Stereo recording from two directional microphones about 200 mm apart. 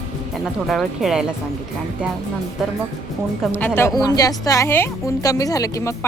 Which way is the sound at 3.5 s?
10° left (ahead or behind).